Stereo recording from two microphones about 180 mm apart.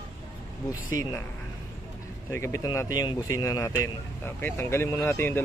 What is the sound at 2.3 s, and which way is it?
Speech, 15° left (ahead or behind).